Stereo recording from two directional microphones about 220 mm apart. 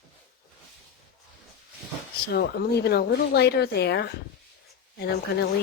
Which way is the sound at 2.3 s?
45° left (ahead or behind).